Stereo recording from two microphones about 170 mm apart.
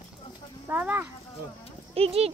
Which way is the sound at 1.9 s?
35° right (ahead or behind).